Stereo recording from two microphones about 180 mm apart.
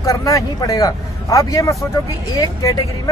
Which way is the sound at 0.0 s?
20° left (ahead or behind).